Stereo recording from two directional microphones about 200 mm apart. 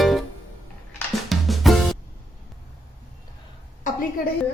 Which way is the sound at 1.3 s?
Centre (ahead or behind).